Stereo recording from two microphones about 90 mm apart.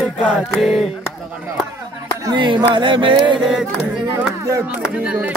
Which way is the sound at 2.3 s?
65° right (ahead or behind).